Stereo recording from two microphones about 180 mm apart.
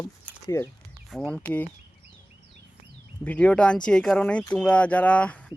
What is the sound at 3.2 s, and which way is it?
Speech, 10° left (ahead or behind).